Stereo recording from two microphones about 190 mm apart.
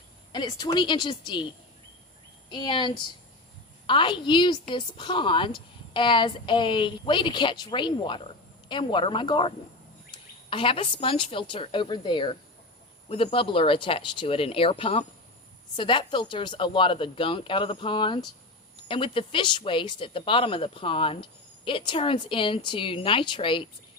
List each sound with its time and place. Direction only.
0.3 s speech: 20° left (ahead or behind)
2.5 s speech: 25° left (ahead or behind)